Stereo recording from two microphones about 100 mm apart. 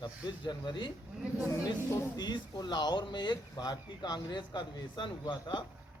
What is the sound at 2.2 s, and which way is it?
Speech, 50° left (ahead or behind).